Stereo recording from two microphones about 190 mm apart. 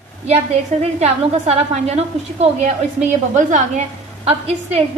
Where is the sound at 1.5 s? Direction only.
35° right (ahead or behind).